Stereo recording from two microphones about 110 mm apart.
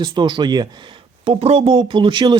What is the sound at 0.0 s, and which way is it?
Speech, 45° right (ahead or behind).